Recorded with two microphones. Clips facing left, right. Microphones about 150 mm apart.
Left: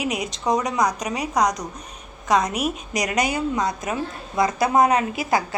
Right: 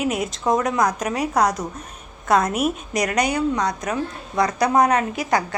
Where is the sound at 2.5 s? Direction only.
45° right (ahead or behind).